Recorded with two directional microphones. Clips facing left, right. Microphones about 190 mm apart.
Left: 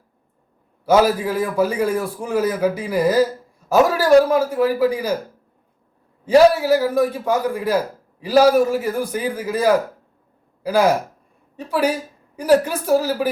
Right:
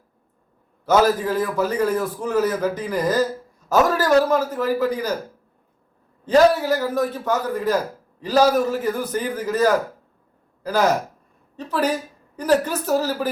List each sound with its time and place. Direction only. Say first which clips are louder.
0.9 s a man's voice: left 2 dB; 10° left (ahead or behind)
6.2 s a man's voice: left 3 dB; 10° left (ahead or behind)